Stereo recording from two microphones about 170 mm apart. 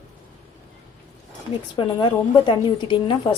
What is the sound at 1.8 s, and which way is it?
Speech, 30° left (ahead or behind).